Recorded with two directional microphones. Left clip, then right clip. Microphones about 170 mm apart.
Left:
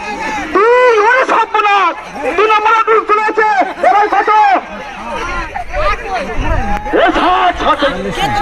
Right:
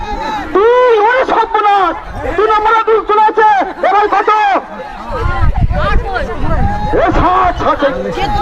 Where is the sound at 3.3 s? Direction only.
35° right (ahead or behind).